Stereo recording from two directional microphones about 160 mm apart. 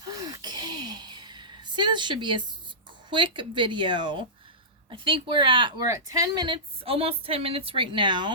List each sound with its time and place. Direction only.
0.0 s a sound: 25° right (ahead or behind)
3.1 s speech: 30° right (ahead or behind)
5.9 s speech: 20° right (ahead or behind)